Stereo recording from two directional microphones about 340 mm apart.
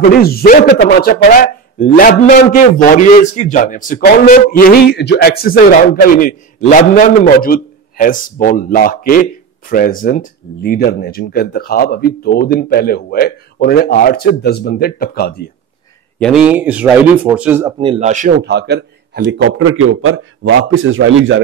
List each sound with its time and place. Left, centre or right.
0.2 s speech: left
16.2 s a man's voice: centre; by 21.4 s right